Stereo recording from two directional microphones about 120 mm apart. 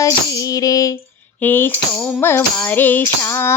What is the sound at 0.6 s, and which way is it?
Female singing, 30° left (ahead or behind).